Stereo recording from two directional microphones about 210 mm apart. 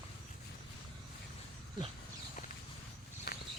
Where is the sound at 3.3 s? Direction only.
45° left (ahead or behind).